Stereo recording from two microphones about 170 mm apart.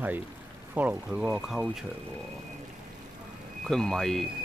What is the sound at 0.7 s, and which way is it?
Speech, 10° right (ahead or behind).